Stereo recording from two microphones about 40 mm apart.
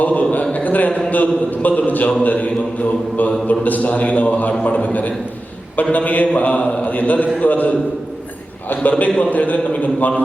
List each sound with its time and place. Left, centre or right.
0.0 s a man's voice: left
0.5 s a sound: left
1.1 s a man's voice: left
8.7 s a man's voice: left